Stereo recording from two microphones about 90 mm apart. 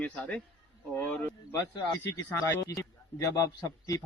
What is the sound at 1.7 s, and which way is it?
Speech, 45° left (ahead or behind).